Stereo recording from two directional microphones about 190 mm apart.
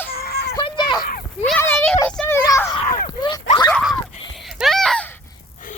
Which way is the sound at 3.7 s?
Centre (ahead or behind).